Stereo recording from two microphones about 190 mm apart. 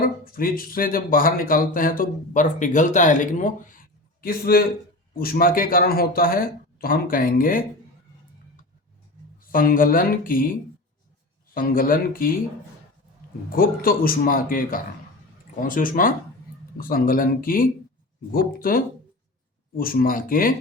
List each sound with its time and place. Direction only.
0.0 s a man's voice: 50° left (ahead or behind)
9.4 s speech: 50° left (ahead or behind)
11.5 s speech: 50° left (ahead or behind)
13.5 s speech: 50° left (ahead or behind)